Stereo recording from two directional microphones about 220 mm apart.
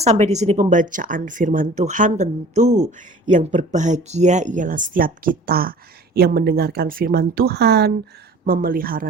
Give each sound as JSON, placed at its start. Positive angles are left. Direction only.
{"t": 0.0, "sound": "speech", "side_deg": -30}